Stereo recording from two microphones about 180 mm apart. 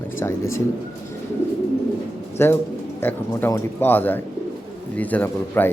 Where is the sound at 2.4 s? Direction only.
15° left (ahead or behind).